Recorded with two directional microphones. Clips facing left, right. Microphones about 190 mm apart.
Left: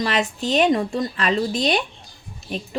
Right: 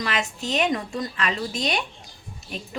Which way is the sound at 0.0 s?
35° left (ahead or behind).